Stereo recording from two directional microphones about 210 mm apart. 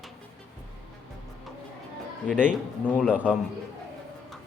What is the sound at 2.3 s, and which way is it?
Speech, 5° left (ahead or behind).